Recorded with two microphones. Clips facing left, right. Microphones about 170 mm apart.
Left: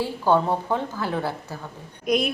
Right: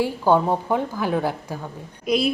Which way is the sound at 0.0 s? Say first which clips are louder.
Right 2 dB; 15° right (ahead or behind).